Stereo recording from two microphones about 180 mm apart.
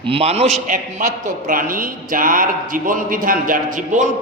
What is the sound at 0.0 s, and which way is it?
A man's voice, 30° right (ahead or behind).